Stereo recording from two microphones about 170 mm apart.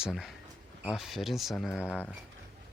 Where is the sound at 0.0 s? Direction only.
Centre (ahead or behind).